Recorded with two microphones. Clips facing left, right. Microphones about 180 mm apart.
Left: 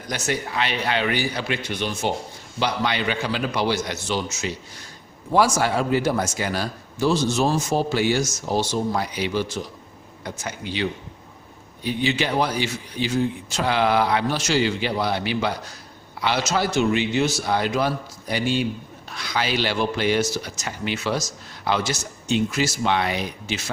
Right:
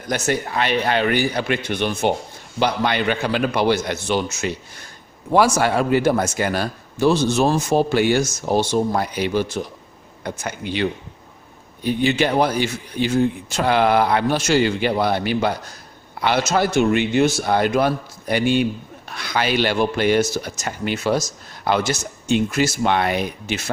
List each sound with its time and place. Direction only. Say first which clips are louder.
0.1 s a man's voice: right 5 dB; 50° right (ahead or behind)